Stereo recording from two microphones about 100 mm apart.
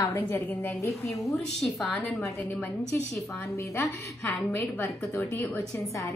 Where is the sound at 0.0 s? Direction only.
25° left (ahead or behind).